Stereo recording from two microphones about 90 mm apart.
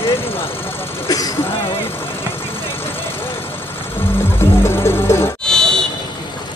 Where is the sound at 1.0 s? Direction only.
45° left (ahead or behind).